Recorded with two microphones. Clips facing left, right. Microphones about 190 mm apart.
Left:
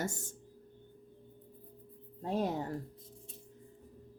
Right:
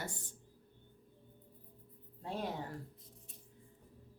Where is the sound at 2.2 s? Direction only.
40° left (ahead or behind).